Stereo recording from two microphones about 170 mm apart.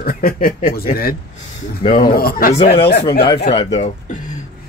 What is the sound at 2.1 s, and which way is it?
Speech, 60° left (ahead or behind).